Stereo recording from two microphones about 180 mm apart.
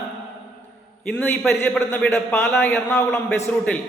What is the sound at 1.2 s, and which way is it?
A man's voice, 10° left (ahead or behind).